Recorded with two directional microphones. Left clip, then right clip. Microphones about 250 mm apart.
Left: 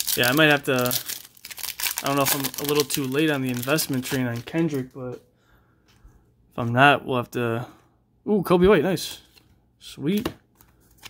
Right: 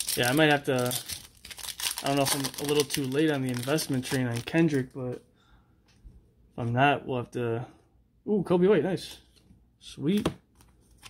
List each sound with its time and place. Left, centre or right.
0.1 s speech: centre
4.5 s speech: centre
6.5 s speech: centre
9.8 s speech: centre